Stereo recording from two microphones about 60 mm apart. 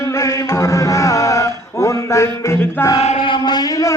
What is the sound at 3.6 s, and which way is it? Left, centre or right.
Speech, left.